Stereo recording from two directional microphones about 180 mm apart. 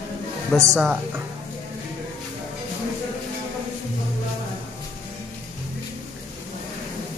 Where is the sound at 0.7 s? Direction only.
5° right (ahead or behind).